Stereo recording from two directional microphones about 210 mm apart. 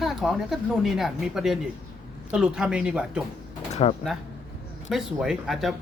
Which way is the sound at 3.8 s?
30° left (ahead or behind).